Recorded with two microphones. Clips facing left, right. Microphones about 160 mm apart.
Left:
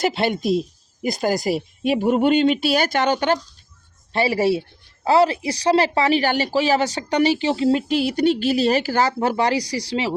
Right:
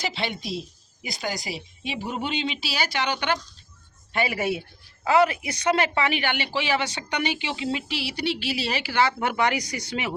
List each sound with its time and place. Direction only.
0.0 s speech: 50° left (ahead or behind); by 10.2 s 30° left (ahead or behind)